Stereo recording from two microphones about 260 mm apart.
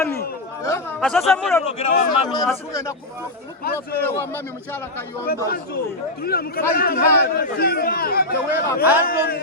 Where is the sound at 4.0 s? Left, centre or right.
Centre.